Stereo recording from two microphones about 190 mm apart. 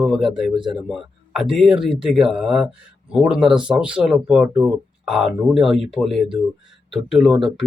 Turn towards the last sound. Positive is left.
turn(degrees=0)  # may be behind; listen again after turning